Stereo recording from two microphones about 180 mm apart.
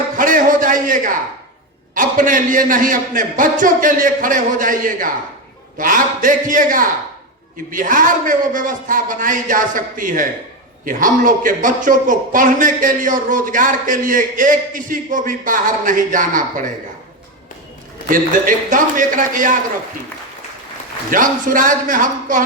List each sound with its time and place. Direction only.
0.2 s a sound: 45° right (ahead or behind)
2.0 s a man's voice: 50° right (ahead or behind)
18.1 s a man's voice: 50° right (ahead or behind)
21.1 s a man's voice: 45° right (ahead or behind)